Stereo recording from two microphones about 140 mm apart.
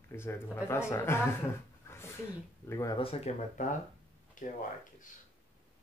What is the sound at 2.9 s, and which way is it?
Speech, 45° left (ahead or behind).